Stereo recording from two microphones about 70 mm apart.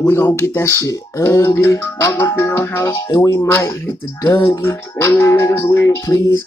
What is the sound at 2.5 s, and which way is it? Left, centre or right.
Music, left.